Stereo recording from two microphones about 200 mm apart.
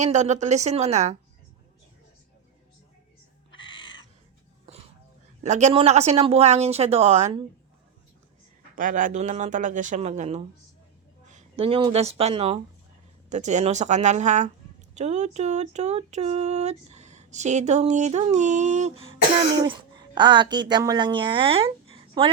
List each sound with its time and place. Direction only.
0.0 s speech: 35° right (ahead or behind)
3.5 s bird: 25° left (ahead or behind)
5.4 s speech: 35° right (ahead or behind)
8.7 s speech: 40° right (ahead or behind)
19.6 s a woman's voice: 25° right (ahead or behind)